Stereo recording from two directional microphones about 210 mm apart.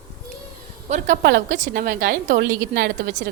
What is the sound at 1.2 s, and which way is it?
A woman's voice, 45° right (ahead or behind).